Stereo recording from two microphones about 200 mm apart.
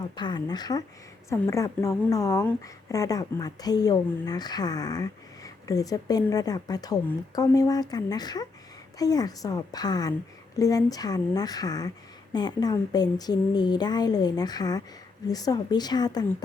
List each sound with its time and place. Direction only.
0.0 s a woman's voice: 20° left (ahead or behind)